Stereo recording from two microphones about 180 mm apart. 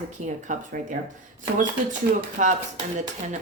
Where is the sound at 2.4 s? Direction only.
45° right (ahead or behind).